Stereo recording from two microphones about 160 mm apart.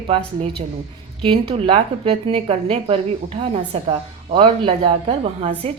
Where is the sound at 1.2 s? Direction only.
35° right (ahead or behind).